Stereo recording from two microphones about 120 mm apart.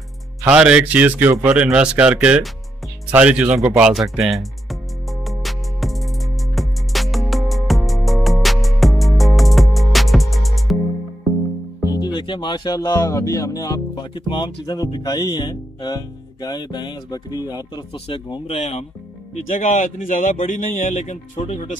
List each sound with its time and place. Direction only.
0.5 s speech: 10° right (ahead or behind)
3.1 s music: 10° right (ahead or behind)
11.8 s speech: 35° left (ahead or behind)
17.9 s speech: 50° left (ahead or behind)
19.3 s speech: 90° left